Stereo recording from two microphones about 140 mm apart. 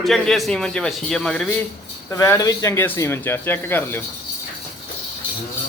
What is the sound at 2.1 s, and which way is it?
Speech, 25° left (ahead or behind).